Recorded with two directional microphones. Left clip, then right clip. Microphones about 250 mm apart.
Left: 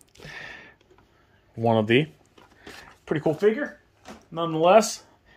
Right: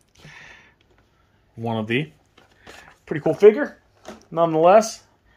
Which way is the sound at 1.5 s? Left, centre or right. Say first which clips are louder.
Left 4 dB; centre.